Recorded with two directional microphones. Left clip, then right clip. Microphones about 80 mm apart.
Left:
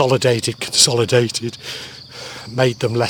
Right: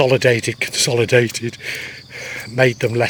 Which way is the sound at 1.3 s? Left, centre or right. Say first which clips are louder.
Right 1 dB; centre.